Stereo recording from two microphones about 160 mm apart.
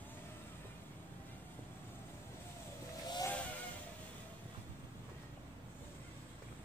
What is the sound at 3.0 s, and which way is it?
Vehicle, 25° left (ahead or behind).